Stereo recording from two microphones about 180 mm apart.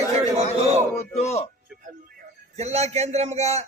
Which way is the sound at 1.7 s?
5° right (ahead or behind).